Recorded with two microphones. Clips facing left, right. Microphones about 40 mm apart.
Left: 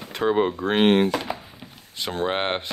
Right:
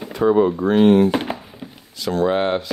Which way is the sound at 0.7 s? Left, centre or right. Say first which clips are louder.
Right 4 dB; left.